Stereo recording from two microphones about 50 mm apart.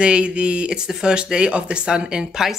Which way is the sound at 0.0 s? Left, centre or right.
Right.